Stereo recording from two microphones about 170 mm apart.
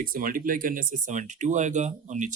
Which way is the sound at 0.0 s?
55° right (ahead or behind).